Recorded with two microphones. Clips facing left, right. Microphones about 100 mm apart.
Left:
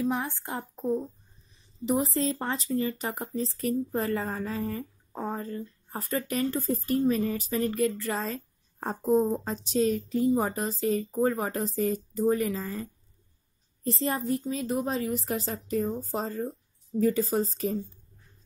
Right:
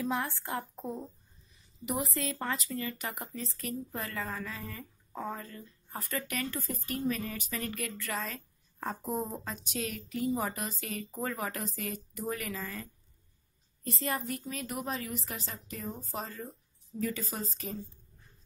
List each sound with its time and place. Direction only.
0.1 s speech: 15° left (ahead or behind)
1.9 s speech: 30° left (ahead or behind)
13.8 s speech: 30° left (ahead or behind)